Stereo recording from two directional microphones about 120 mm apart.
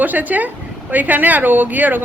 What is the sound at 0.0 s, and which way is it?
Speech, 15° right (ahead or behind).